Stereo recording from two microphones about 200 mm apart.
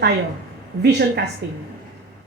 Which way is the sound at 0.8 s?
55° right (ahead or behind).